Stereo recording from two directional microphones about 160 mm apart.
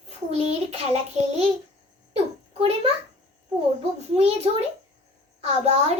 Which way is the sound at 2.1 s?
40° right (ahead or behind).